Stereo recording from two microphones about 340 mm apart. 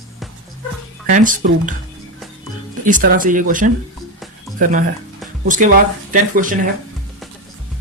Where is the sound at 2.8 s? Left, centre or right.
Right.